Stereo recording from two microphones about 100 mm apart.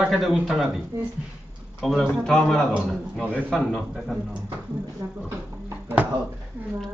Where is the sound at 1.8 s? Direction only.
Centre (ahead or behind).